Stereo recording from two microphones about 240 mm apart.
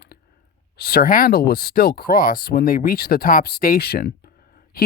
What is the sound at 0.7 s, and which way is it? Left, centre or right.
Speech, left.